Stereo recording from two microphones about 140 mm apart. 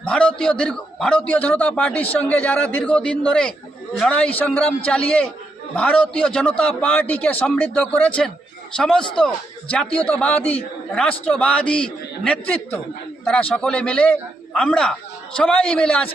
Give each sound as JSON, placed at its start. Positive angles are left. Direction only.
{"t": 0.0, "sound": "a man's voice", "side_deg": 10}